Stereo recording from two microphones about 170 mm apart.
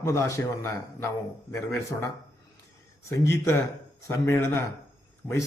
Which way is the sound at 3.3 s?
15° left (ahead or behind).